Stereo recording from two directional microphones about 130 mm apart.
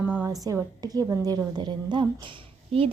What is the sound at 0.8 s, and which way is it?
A woman's voice, 30° right (ahead or behind).